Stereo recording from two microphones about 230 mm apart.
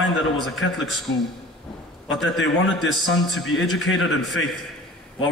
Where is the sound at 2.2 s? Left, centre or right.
Left.